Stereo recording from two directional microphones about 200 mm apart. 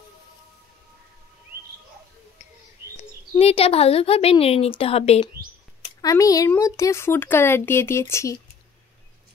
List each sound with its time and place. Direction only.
3.0 s speech: 30° left (ahead or behind)
5.9 s speech: 15° left (ahead or behind)